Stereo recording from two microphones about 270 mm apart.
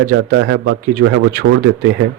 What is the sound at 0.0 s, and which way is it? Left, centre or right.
Speech, right.